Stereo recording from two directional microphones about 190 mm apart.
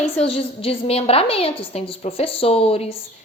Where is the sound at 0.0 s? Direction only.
30° left (ahead or behind).